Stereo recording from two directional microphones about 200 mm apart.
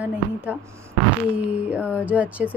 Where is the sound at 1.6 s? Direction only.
5° right (ahead or behind).